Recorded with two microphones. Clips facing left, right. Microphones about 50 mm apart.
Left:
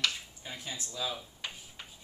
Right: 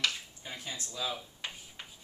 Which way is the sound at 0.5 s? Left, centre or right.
Centre.